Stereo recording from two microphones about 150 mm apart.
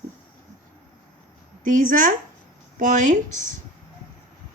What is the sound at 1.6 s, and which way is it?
Speech, 60° right (ahead or behind).